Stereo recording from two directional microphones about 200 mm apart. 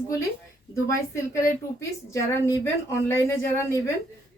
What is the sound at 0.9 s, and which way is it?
Speech, 15° left (ahead or behind).